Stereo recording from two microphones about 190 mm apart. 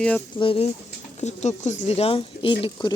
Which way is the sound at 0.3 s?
30° left (ahead or behind).